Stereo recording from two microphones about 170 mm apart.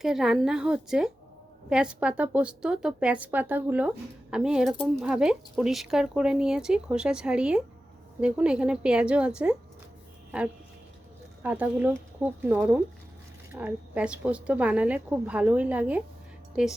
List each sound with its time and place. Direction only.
0.0 s a woman's voice: 5° right (ahead or behind)
11.4 s a woman's voice: 10° right (ahead or behind)